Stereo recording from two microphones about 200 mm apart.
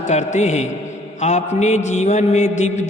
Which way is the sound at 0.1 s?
35° left (ahead or behind).